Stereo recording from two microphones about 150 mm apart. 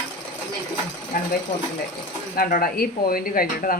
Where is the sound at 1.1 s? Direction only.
65° left (ahead or behind).